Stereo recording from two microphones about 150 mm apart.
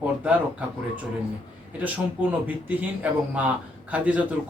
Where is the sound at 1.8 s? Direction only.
10° right (ahead or behind).